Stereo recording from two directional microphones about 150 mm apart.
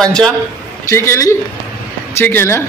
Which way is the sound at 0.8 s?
20° left (ahead or behind).